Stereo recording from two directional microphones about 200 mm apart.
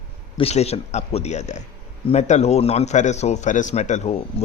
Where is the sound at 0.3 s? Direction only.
30° left (ahead or behind).